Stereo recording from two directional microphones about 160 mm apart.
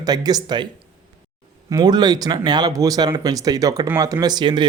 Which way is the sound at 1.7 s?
25° right (ahead or behind).